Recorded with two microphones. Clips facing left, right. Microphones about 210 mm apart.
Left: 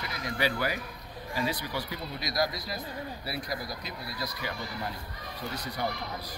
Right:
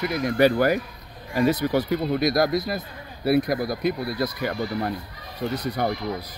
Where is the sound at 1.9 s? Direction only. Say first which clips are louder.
Right 15 dB; 55° right (ahead or behind).